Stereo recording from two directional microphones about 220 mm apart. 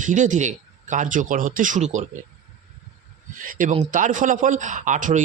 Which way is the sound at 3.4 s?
35° right (ahead or behind).